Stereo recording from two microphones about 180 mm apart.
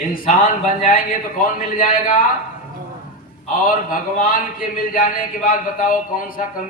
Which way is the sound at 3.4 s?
50° left (ahead or behind).